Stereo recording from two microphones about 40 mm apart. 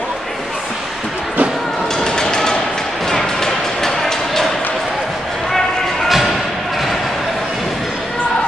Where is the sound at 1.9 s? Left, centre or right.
Centre.